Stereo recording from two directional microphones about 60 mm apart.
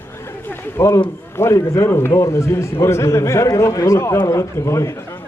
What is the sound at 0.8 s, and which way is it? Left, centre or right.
A man's voice, left.